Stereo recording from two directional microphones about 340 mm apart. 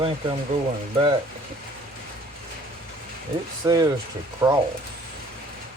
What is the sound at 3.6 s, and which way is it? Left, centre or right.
Speech, centre.